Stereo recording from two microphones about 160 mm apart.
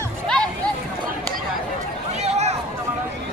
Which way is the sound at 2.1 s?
45° right (ahead or behind).